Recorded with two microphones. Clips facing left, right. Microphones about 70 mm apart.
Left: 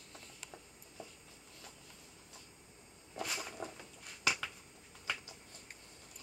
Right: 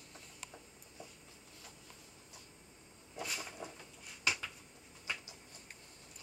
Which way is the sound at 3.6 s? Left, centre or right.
Left.